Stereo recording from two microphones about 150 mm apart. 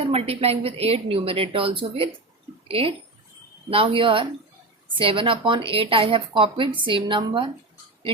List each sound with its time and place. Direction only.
0.0 s a woman's voice: 40° right (ahead or behind)